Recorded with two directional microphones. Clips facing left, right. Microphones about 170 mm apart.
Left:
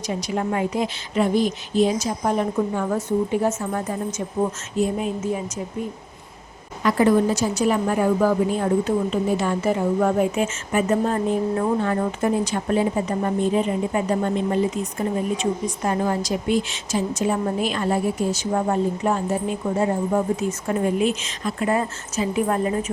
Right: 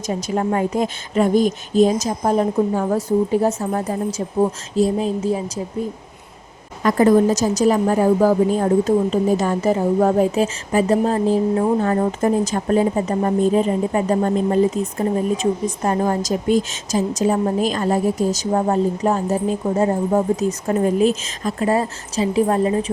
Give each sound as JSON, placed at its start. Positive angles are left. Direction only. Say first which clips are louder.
{"t": 0.1, "sound": "a woman's voice", "louder": "right 4 dB", "side_deg": -40}
{"t": 6.8, "sound": "a woman's voice", "louder": "right 4 dB", "side_deg": -45}